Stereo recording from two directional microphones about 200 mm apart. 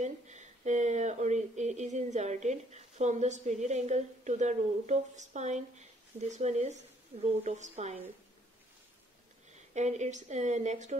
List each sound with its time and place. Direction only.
0.0 s speech: 35° right (ahead or behind)
9.8 s speech: 35° right (ahead or behind)